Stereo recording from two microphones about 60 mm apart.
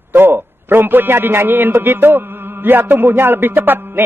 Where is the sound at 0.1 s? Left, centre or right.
Right.